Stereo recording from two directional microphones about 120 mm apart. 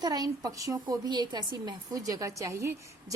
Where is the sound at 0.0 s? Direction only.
30° right (ahead or behind).